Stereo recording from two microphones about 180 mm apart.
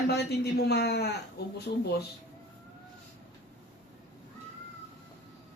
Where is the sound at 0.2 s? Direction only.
65° left (ahead or behind).